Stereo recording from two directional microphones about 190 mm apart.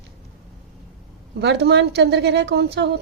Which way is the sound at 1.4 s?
60° right (ahead or behind).